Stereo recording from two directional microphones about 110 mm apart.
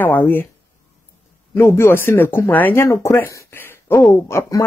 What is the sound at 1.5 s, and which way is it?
Speech, 20° left (ahead or behind).